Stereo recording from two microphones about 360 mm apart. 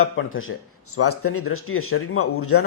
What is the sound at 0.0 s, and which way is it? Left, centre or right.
Speech, left.